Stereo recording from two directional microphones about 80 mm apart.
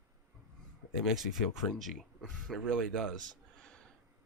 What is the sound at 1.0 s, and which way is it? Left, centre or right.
Speech, centre.